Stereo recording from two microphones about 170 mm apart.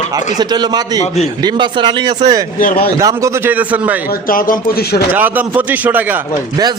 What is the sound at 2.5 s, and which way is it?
Speech, 60° left (ahead or behind).